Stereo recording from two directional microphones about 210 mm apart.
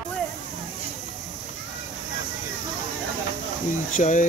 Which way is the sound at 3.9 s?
35° left (ahead or behind).